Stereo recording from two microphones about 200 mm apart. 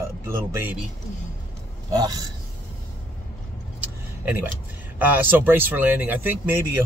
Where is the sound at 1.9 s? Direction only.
20° right (ahead or behind).